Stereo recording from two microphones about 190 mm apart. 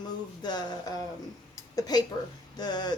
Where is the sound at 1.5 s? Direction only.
20° left (ahead or behind).